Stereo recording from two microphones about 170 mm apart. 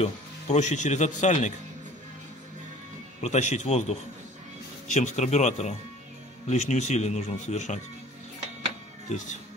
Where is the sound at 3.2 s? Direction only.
45° left (ahead or behind).